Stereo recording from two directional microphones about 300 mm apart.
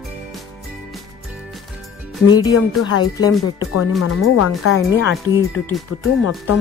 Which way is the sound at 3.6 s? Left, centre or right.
Left.